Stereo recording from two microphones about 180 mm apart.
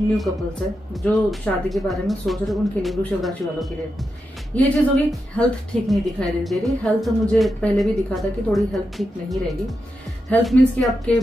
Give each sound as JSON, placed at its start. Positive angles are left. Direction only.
{"t": 0.2, "sound": "speech", "side_deg": 0}